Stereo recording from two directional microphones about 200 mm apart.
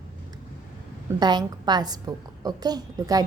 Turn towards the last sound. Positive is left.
turn(degrees=-20)  # may be behind; listen again after turning